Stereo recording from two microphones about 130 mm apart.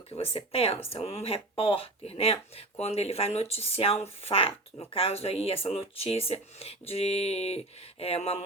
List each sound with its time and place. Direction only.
0.1 s speech: 50° left (ahead or behind)